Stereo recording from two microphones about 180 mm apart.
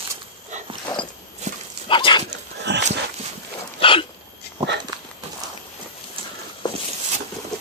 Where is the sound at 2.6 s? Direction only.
75° right (ahead or behind).